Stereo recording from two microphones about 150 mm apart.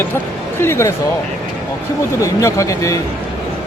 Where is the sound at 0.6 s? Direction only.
15° left (ahead or behind).